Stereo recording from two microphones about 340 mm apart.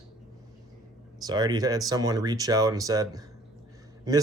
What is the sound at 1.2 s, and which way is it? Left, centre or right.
Speech, centre.